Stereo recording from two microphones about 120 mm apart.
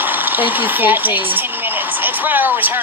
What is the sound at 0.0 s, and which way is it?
Speech, 15° right (ahead or behind).